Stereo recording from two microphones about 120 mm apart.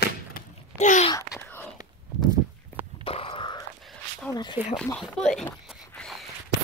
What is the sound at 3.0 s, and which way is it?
Wail, 50° left (ahead or behind).